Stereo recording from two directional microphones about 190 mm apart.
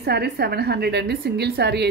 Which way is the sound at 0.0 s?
55° right (ahead or behind).